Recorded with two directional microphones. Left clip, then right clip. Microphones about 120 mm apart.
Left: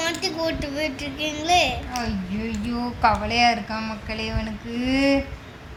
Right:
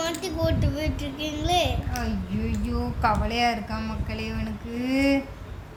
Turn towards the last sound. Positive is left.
turn(degrees=15)  # may be behind; listen again after turning